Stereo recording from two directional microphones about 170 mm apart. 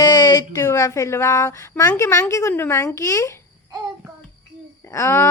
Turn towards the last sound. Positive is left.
turn(degrees=15)  # may be behind; listen again after turning